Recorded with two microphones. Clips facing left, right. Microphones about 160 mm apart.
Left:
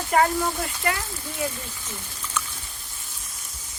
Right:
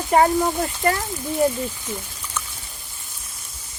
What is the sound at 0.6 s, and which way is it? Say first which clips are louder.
Speech: right 6 dB; 40° right (ahead or behind).